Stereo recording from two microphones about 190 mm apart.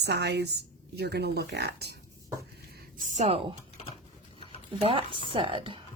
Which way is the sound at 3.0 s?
35° right (ahead or behind).